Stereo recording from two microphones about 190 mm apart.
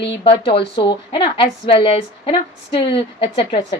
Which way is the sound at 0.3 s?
30° left (ahead or behind).